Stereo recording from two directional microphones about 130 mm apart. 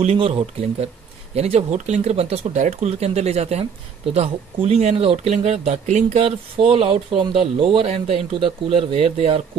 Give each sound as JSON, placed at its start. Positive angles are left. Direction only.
{"t": 0.0, "sound": "speech", "side_deg": -50}
{"t": 6.2, "sound": "speech", "side_deg": -45}